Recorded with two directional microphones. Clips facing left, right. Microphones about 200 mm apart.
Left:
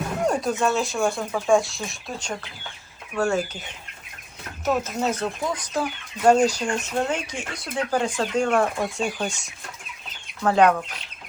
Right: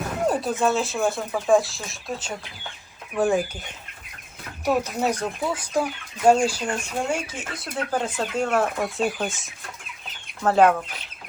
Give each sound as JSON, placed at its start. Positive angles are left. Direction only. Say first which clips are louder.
{"t": 0.3, "sound": "speech", "louder": "right 1 dB", "side_deg": 0}
{"t": 3.2, "sound": "speech", "louder": "right 2 dB", "side_deg": -15}
{"t": 4.6, "sound": "speech", "louder": "right 1 dB", "side_deg": -15}